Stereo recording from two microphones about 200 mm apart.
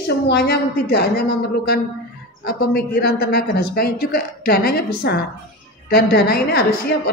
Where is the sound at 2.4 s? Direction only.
50° left (ahead or behind).